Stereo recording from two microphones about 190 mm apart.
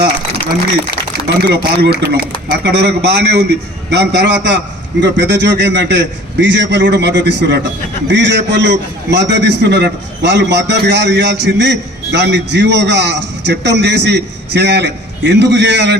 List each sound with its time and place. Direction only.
1.4 s a man's voice: 55° right (ahead or behind)